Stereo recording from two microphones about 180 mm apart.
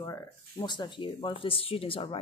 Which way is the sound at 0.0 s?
15° left (ahead or behind).